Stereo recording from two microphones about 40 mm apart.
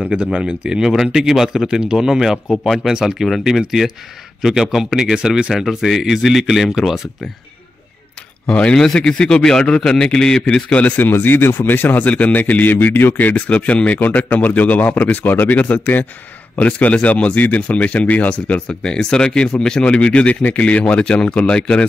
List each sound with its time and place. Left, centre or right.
0.1 s a man's voice: right; by 6.8 s centre
8.5 s a man's voice: left
10.7 s speech: left
11.0 s speech: left
12.0 s speech: left
12.7 s speech: left
18.7 s speech: centre
19.8 s speech: left